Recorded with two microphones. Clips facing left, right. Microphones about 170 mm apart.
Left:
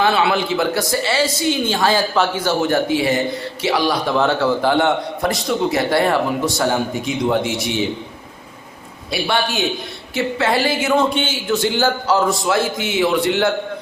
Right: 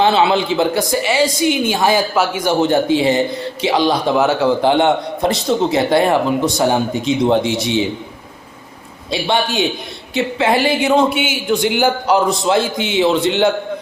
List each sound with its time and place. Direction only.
0.0 s a woman's voice: 25° right (ahead or behind)
9.0 s a man's voice: 20° right (ahead or behind)